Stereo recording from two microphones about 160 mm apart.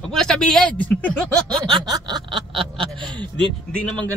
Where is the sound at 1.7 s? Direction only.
25° right (ahead or behind).